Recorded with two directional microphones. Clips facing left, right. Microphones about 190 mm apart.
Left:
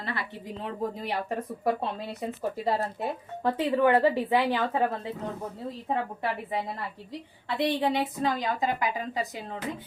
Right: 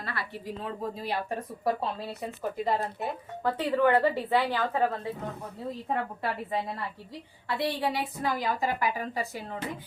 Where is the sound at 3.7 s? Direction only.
15° left (ahead or behind).